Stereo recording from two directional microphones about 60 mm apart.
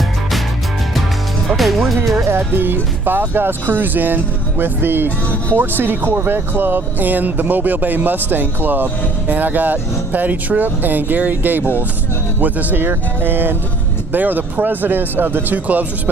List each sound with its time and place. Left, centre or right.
1.5 s music: centre
2.1 s speech: right